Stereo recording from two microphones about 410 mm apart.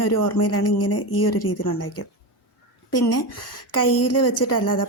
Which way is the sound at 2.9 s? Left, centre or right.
Left.